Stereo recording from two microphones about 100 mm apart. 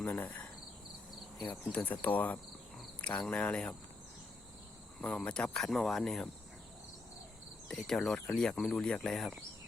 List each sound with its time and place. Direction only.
0.0 s cricket: 15° left (ahead or behind)
1.5 s speech: 15° left (ahead or behind)
2.7 s cricket: 10° left (ahead or behind)
4.9 s speech: 10° left (ahead or behind)
7.8 s speech: centre (ahead or behind)